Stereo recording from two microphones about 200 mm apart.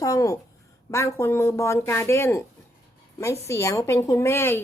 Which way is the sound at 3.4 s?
15° left (ahead or behind).